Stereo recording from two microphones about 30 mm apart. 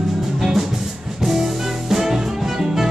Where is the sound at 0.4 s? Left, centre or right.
Centre.